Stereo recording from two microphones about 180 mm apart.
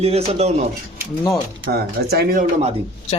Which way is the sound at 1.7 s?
60° right (ahead or behind).